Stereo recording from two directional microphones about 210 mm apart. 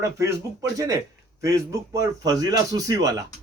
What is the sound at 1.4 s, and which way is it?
A man's voice, 15° right (ahead or behind).